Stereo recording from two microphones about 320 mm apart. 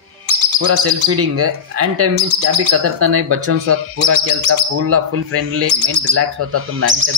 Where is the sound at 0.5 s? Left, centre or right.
Right.